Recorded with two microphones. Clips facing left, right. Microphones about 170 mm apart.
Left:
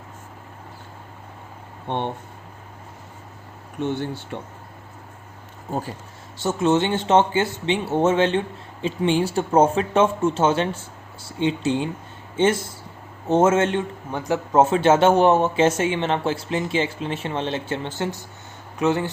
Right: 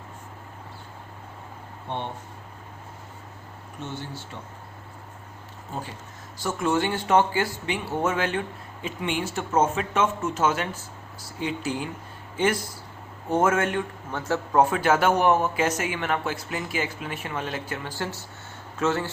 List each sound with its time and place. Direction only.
1.9 s speech: 60° left (ahead or behind)
3.8 s speech: 60° left (ahead or behind)
6.4 s speech: 25° left (ahead or behind)